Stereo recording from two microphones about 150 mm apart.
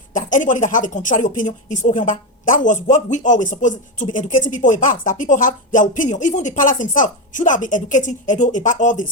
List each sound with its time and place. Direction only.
0.1 s speech: 60° left (ahead or behind)